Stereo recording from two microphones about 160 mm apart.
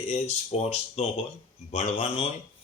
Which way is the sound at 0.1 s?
40° left (ahead or behind).